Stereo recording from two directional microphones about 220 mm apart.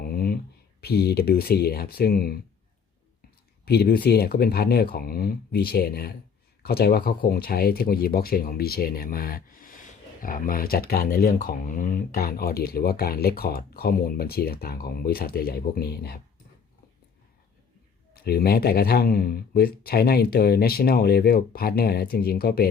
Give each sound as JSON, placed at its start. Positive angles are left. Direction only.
{"t": 0.0, "sound": "a sound", "side_deg": 45}
{"t": 0.8, "sound": "speech", "side_deg": 45}
{"t": 3.7, "sound": "speech", "side_deg": 45}
{"t": 18.1, "sound": "speech", "side_deg": 45}